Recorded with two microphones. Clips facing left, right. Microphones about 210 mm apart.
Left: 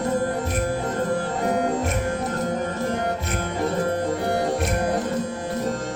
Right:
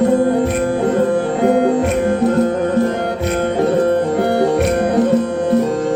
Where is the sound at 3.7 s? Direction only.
65° right (ahead or behind).